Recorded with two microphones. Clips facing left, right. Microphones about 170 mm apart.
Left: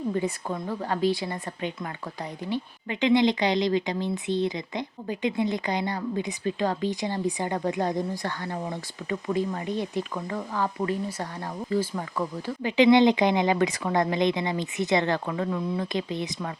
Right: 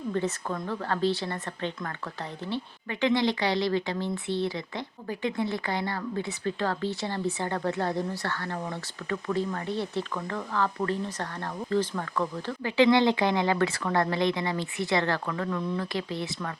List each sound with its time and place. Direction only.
0.1 s speech: 10° left (ahead or behind)